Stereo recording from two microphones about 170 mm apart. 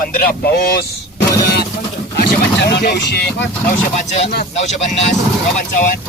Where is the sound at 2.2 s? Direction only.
80° left.